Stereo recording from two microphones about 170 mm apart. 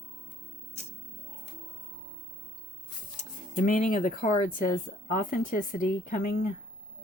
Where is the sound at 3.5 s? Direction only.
50° left (ahead or behind).